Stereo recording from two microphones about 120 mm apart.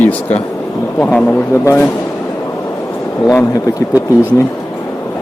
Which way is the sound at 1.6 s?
25° left (ahead or behind).